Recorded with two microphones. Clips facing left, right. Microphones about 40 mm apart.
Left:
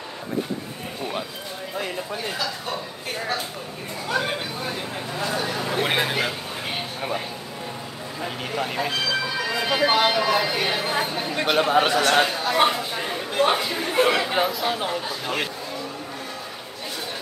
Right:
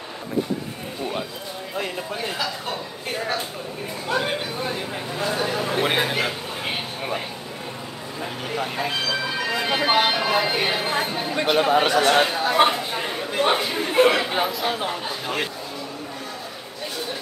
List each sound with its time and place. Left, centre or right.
5.4 s speech: centre
8.2 s speech: centre
9.5 s speech: centre
10.7 s speech: centre